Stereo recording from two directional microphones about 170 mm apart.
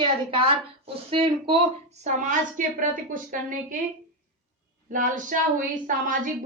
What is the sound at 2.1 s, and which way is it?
A woman's voice, 45° right (ahead or behind).